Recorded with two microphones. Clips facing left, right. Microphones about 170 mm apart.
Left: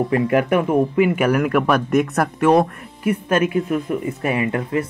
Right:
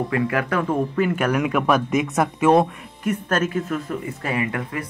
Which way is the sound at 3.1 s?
10° left (ahead or behind).